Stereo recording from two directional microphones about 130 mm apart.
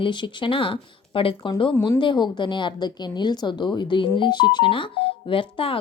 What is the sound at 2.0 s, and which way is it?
A woman's voice, 35° left (ahead or behind).